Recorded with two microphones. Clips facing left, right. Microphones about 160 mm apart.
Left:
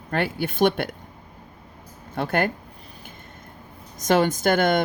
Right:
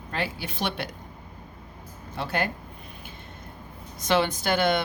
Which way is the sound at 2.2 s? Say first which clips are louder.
Left 5 dB; 55° left (ahead or behind).